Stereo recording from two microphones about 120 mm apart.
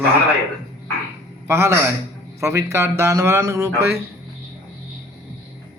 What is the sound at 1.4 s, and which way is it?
A man's voice, 20° right (ahead or behind).